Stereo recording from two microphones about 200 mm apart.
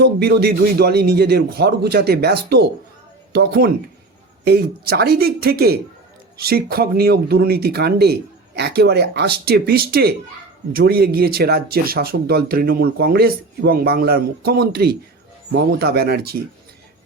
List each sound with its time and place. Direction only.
0.0 s a man's voice: 55° right (ahead or behind)